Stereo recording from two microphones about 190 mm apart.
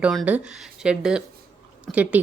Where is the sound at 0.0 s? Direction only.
5° right (ahead or behind).